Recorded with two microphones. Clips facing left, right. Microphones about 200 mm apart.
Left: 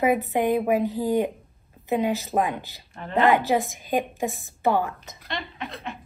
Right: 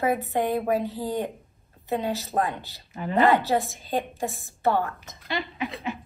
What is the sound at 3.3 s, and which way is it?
A woman's voice, 15° left (ahead or behind).